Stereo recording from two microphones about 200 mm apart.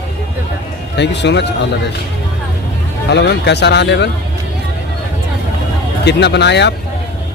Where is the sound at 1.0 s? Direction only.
60° left (ahead or behind).